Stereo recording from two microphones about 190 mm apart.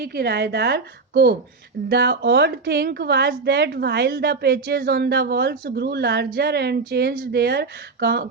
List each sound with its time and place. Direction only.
0.0 s a woman's voice: 55° right (ahead or behind)